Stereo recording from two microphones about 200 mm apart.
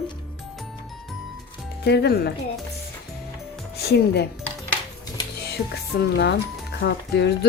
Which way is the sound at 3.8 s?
55° left (ahead or behind).